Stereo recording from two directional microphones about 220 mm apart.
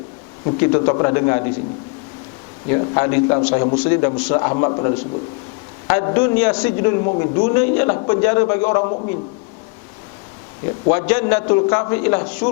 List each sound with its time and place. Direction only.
0.6 s a man's voice: 15° left (ahead or behind)
2.6 s a man's voice: 20° left (ahead or behind)
10.9 s a man's voice: 10° left (ahead or behind)